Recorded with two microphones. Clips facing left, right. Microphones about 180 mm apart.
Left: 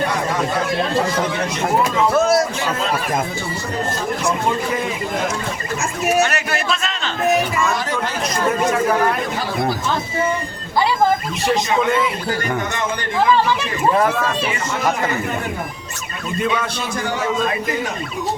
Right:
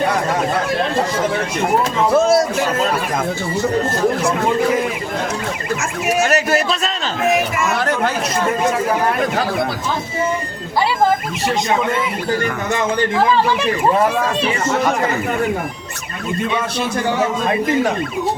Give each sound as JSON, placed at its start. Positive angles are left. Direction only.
{"t": 2.1, "sound": "a sound", "side_deg": -25}
{"t": 6.2, "sound": "speech", "side_deg": -40}
{"t": 7.8, "sound": "chatter", "side_deg": -55}